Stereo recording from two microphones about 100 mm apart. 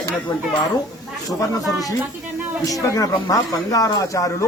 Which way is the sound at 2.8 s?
35° left (ahead or behind).